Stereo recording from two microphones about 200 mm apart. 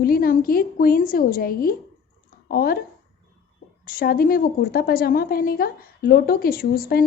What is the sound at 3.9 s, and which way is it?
A woman's voice, 45° left (ahead or behind).